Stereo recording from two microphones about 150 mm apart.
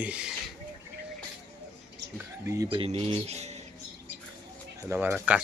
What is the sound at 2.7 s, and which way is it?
Speech, 40° right (ahead or behind).